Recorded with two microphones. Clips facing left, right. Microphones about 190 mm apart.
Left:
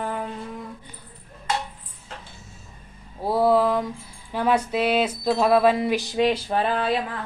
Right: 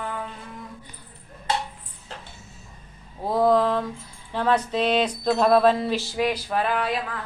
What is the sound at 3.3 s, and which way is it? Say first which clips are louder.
Speech: left 1 dB; 10° left (ahead or behind).